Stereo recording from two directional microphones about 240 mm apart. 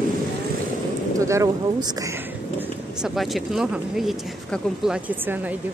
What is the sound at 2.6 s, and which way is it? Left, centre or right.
Speech, centre.